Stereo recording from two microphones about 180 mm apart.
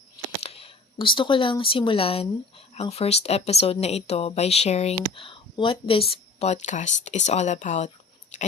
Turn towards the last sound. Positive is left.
turn(degrees=40)  # may be behind; listen again after turning